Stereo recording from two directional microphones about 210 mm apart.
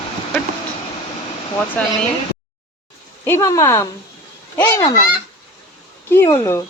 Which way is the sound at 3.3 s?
15° left (ahead or behind).